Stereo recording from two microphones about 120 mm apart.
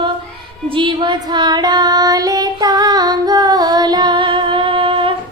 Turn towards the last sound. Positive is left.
turn(degrees=-45)  # may be behind; listen again after turning